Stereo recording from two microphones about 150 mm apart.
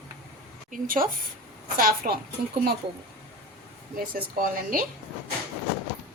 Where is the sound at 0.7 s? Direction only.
65° right (ahead or behind).